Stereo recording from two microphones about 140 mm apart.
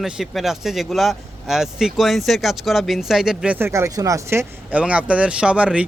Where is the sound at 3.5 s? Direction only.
20° right (ahead or behind).